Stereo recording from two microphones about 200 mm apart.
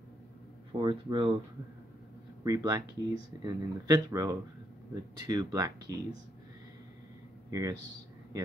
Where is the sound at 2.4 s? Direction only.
15° right (ahead or behind).